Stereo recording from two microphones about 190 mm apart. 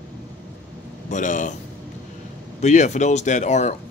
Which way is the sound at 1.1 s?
40° left (ahead or behind).